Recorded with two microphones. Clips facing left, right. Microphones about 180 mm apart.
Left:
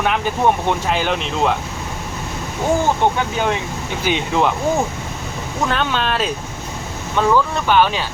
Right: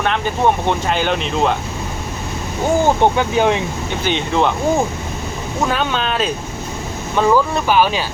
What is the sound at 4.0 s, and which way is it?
Speech, 10° left (ahead or behind).